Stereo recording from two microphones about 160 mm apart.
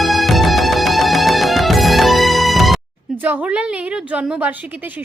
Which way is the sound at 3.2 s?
10° right (ahead or behind).